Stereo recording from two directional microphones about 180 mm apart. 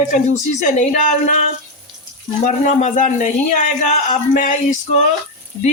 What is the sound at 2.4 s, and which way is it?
A man's voice, 45° left (ahead or behind).